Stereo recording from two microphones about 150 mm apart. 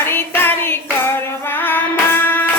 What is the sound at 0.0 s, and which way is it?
Music, 15° left (ahead or behind).